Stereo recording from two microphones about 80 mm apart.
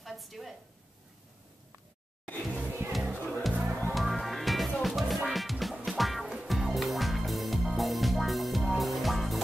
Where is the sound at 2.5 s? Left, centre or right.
Right.